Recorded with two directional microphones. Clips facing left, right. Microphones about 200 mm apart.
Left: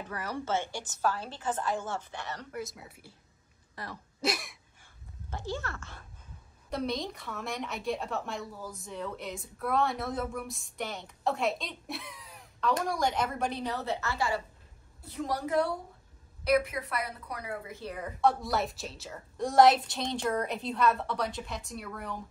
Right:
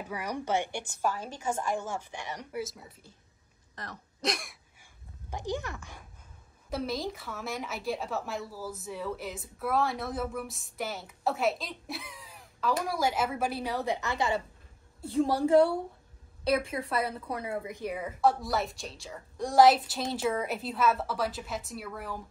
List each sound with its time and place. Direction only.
0.0 s a woman's voice: 10° right (ahead or behind)
2.6 s a woman's voice: centre (ahead or behind)
3.7 s throat clearing: 10° left (ahead or behind)
5.3 s a woman's voice: 15° right (ahead or behind)
6.7 s a woman's voice: centre (ahead or behind)